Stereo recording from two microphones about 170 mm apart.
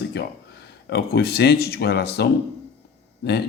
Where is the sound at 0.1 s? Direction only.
80° left.